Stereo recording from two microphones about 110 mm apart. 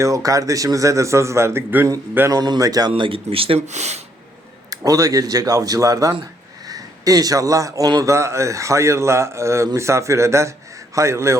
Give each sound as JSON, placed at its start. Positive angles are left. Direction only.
{"t": 0.0, "sound": "a man's voice", "side_deg": -30}
{"t": 2.9, "sound": "speech", "side_deg": -60}
{"t": 4.7, "sound": "a man's voice", "side_deg": -30}